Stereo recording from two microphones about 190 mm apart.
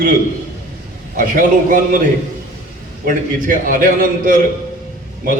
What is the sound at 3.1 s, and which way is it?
A man's voice, 45° right (ahead or behind).